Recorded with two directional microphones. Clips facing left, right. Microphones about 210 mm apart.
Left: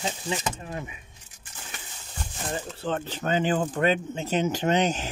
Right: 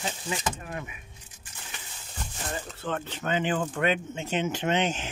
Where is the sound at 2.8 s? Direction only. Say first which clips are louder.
Left 3 dB; 30° left (ahead or behind).